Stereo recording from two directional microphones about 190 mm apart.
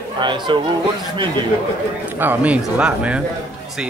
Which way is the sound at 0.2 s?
25° right (ahead or behind).